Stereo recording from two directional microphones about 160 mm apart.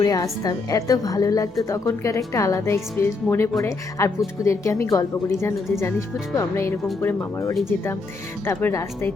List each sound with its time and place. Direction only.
0.0 s a woman's voice: 25° left (ahead or behind)